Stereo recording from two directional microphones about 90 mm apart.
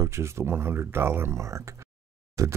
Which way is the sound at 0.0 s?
30° right (ahead or behind).